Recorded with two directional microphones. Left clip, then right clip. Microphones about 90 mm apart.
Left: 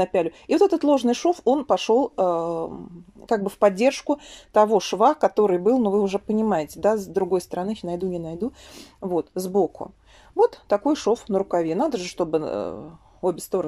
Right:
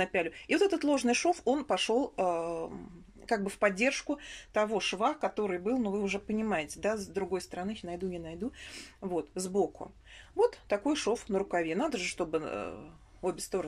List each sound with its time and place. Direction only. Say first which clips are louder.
0.0 s speech: left 9 dB; 50° left (ahead or behind)
9.0 s speech: left 10 dB; 35° left (ahead or behind)